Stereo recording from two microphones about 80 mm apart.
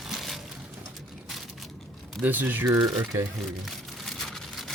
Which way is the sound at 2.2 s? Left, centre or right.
Right.